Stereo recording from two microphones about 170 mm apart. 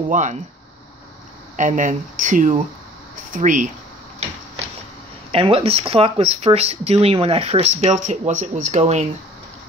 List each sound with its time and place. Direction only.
0.1 s speech: 45° right (ahead or behind)
1.6 s speech: 50° right (ahead or behind)
5.3 s speech: 35° right (ahead or behind)